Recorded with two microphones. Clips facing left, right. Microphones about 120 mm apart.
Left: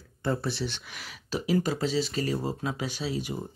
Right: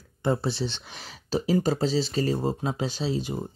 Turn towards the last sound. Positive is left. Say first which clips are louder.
# right 3 dB
turn(degrees=-25)  # may be behind; listen again after turning